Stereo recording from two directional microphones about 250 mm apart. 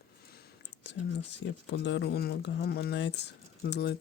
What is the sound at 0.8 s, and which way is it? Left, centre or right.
Speech, left.